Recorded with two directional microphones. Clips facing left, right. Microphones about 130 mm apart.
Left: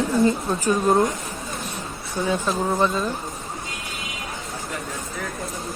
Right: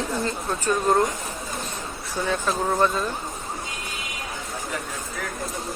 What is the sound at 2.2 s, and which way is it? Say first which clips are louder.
Speech: left 1 dB; centre (ahead or behind).